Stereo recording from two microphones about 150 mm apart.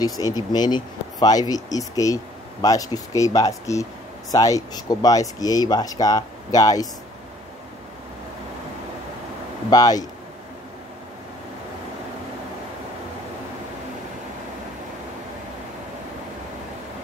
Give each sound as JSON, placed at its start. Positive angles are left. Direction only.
{"t": 0.2, "sound": "speech", "side_deg": 25}
{"t": 9.7, "sound": "speech", "side_deg": 25}